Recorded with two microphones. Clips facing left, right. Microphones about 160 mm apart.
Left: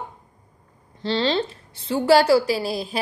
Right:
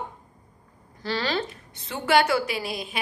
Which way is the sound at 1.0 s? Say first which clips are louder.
Left 5 dB; 25° left (ahead or behind).